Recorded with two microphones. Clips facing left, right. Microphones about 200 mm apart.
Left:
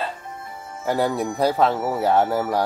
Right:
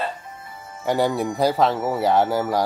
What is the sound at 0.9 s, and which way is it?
Speech, centre (ahead or behind).